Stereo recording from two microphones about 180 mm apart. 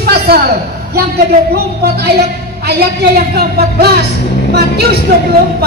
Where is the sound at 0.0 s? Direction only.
60° right (ahead or behind).